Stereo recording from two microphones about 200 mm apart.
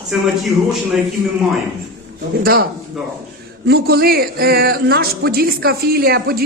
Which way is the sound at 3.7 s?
50° right (ahead or behind).